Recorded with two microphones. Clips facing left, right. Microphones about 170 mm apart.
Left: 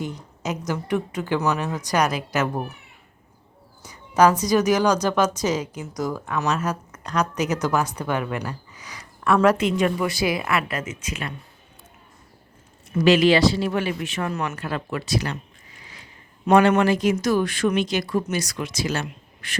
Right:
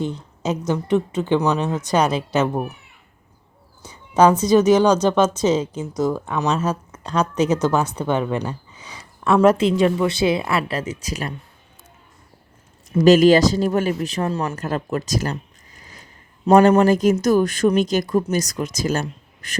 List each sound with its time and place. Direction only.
0.0 s speech: 30° right (ahead or behind)
3.8 s speech: 25° right (ahead or behind)
13.1 s speech: 45° right (ahead or behind)